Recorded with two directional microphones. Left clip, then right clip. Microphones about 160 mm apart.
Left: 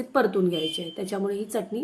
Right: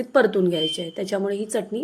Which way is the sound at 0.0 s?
20° right (ahead or behind).